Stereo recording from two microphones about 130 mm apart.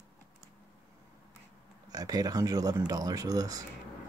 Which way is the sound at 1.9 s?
30° right (ahead or behind).